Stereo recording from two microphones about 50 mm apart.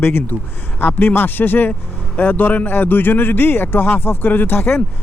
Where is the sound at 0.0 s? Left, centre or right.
Left.